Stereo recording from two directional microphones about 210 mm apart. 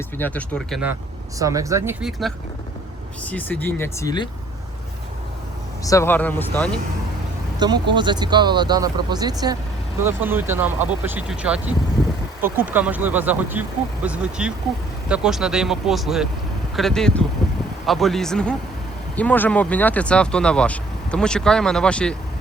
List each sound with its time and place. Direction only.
0.2 s speech: 5° left (ahead or behind)
1.4 s speech: 15° right (ahead or behind); by 4.3 s 20° left (ahead or behind)
5.8 s speech: 15° left (ahead or behind)
7.6 s speech: 20° right (ahead or behind); by 22.1 s 5° left (ahead or behind)